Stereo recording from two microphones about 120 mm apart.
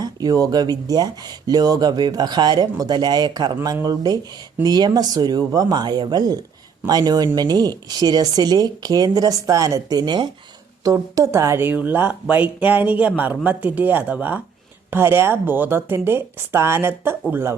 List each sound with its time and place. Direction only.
0.0 s a woman's voice: 30° right (ahead or behind)